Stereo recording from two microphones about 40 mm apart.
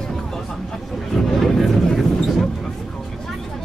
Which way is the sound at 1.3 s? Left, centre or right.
Centre.